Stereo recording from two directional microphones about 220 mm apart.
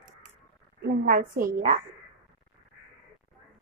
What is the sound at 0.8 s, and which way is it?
A woman's voice, 40° right (ahead or behind).